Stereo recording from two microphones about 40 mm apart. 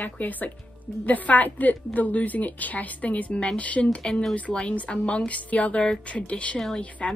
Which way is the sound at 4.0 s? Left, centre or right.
Centre.